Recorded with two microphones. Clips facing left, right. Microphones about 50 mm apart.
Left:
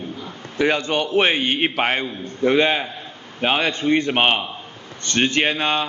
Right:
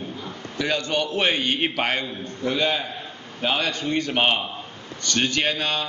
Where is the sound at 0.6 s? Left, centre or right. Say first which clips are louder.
Left 5 dB; left.